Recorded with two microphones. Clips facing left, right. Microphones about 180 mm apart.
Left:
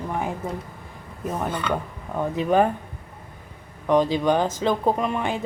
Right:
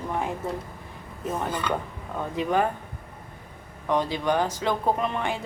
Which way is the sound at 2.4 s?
20° left (ahead or behind).